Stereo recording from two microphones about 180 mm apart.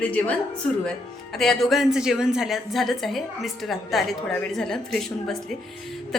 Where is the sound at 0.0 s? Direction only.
5° left (ahead or behind).